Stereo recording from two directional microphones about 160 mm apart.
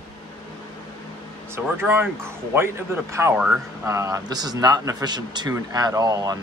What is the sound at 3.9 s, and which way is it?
Speech, 20° right (ahead or behind).